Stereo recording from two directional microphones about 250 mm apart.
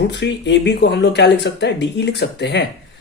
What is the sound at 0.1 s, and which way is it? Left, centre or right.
Speech, left.